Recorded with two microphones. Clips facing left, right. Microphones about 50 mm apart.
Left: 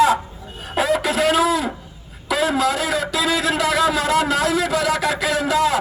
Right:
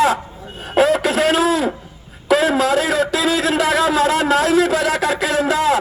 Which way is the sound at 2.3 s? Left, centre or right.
Right.